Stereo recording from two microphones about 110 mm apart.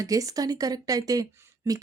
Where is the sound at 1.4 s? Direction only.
30° right (ahead or behind).